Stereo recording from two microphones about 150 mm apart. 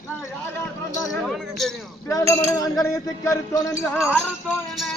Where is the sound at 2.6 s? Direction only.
25° left (ahead or behind).